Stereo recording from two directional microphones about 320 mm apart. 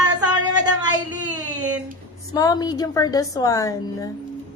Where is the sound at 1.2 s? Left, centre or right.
Centre.